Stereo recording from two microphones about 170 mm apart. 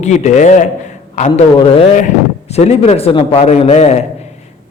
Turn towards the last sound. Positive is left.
turn(degrees=40)  # may be behind; listen again after turning